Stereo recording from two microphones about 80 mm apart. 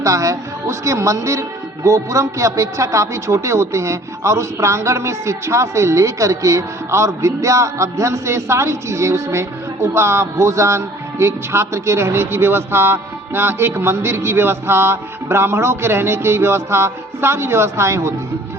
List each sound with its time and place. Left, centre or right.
0.0 s a woman's voice: right